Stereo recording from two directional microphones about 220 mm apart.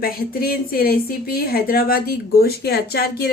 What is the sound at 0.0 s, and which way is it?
A woman's voice, 45° left (ahead or behind).